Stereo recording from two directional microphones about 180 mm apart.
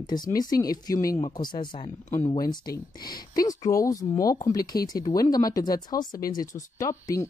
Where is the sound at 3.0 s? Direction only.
20° left (ahead or behind).